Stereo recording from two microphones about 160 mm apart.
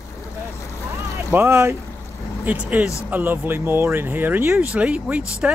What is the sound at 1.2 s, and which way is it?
Speech, 15° right (ahead or behind).